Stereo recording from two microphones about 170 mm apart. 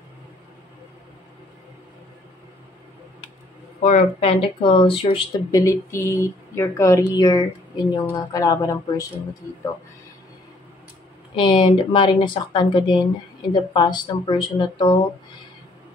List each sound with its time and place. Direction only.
3.8 s speech: 40° left (ahead or behind)
5.5 s a woman's voice: 15° left (ahead or behind)
11.3 s speech: 30° left (ahead or behind)